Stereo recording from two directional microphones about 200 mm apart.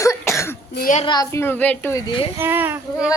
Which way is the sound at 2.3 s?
10° right (ahead or behind).